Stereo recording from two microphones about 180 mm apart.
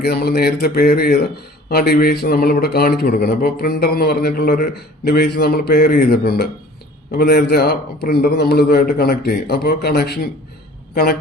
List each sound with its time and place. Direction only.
0.0 s a man's voice: 60° left (ahead or behind)